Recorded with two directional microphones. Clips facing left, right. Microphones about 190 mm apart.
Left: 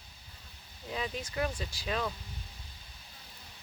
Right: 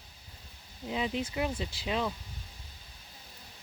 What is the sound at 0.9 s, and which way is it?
Speech, 20° right (ahead or behind).